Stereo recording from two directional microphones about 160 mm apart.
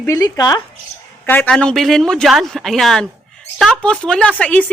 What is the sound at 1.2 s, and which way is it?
A woman's voice, 10° left (ahead or behind).